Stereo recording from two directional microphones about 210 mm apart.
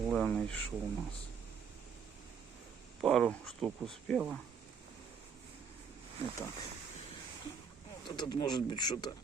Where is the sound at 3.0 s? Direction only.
Centre (ahead or behind).